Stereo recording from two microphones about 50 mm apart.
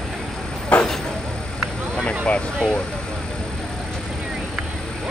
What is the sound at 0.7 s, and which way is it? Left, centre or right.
Vehicle, left.